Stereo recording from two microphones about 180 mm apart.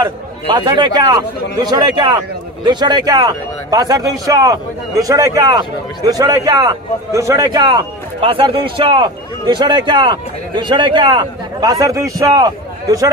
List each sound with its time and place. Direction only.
0.0 s a man's voice: 25° right (ahead or behind)